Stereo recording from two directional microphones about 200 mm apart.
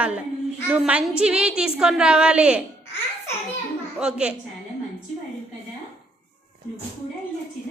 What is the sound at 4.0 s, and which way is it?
Speech, 5° right (ahead or behind).